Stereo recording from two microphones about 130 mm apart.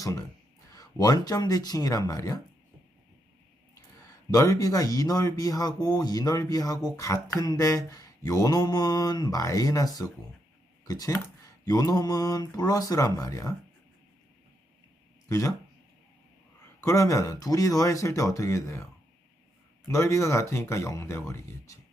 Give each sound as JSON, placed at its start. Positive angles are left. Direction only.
{"t": 0.0, "sound": "speech", "side_deg": 30}
{"t": 4.3, "sound": "speech", "side_deg": 25}
{"t": 15.3, "sound": "speech", "side_deg": 25}
{"t": 16.8, "sound": "speech", "side_deg": 25}
{"t": 19.9, "sound": "speech", "side_deg": 25}